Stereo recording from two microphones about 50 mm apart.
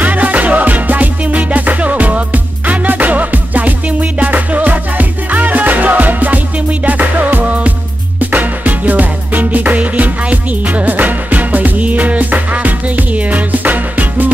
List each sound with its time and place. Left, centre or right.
0.0 s music: right